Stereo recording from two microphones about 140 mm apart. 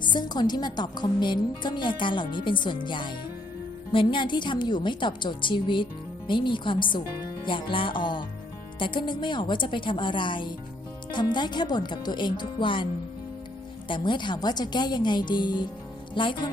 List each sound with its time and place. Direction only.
0.0 s a woman's voice: 35° left (ahead or behind)